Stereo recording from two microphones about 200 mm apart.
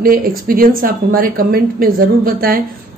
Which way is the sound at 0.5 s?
45° right (ahead or behind).